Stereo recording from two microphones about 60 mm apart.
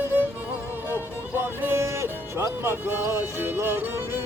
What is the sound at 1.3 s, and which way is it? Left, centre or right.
Music, right.